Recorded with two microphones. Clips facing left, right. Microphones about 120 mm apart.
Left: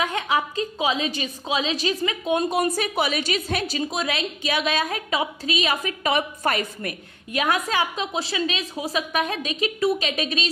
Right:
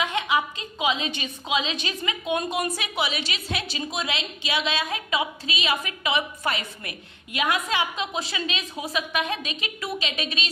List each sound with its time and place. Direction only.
0.0 s a woman's voice: 40° left (ahead or behind)